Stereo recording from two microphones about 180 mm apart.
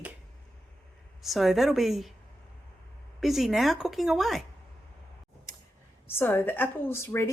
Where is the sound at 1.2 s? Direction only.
Centre (ahead or behind).